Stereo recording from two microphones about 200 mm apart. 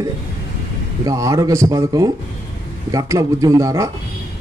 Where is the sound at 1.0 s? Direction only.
15° right (ahead or behind).